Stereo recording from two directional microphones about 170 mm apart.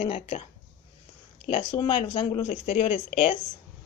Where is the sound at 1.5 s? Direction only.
30° left (ahead or behind).